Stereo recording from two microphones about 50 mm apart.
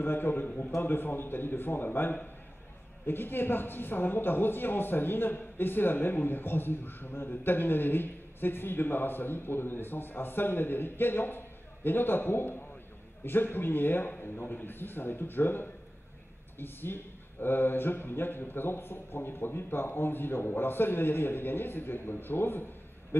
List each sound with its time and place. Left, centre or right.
0.0 s a man's voice: left